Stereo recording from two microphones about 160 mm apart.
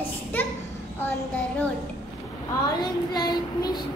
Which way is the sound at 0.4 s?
15° left (ahead or behind).